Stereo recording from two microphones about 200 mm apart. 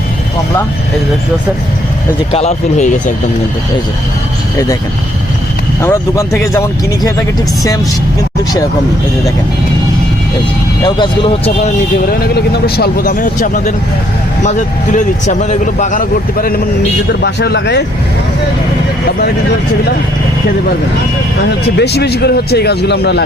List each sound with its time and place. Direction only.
2.3 s a man's voice: 35° left (ahead or behind)
5.8 s speech: 15° left (ahead or behind)
10.8 s speech: 25° left (ahead or behind)
12.2 s speech: 50° left (ahead or behind)
14.9 s a man's voice: 35° left (ahead or behind)
17.1 s speech: 55° left (ahead or behind)
21.8 s speech: 55° left (ahead or behind)